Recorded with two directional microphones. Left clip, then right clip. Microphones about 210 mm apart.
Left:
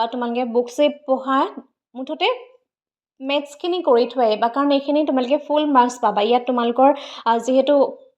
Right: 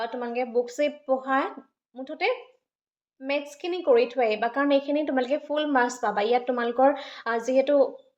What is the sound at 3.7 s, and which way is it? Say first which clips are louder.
Speech: left 4 dB; 25° left (ahead or behind).